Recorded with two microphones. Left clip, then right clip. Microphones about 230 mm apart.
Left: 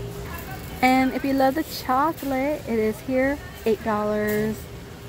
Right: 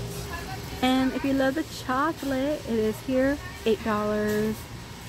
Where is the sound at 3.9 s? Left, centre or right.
Centre.